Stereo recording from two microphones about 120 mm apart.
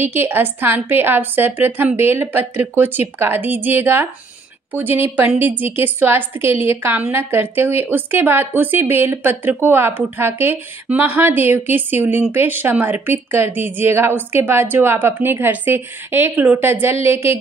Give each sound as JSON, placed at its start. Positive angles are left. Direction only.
{"t": 0.0, "sound": "speech", "side_deg": -20}
{"t": 5.1, "sound": "a woman's voice", "side_deg": -15}